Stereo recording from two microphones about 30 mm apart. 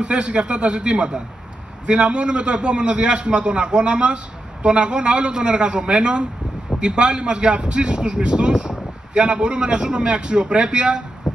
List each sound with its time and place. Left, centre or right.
0.0 s a man's voice: right